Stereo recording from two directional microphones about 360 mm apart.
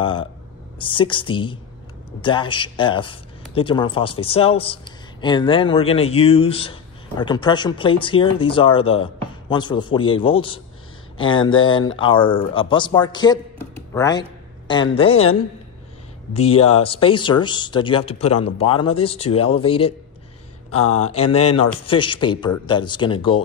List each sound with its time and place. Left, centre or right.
0.0 s speech: centre
16.3 s speech: centre
20.7 s speech: left
21.2 s speech: centre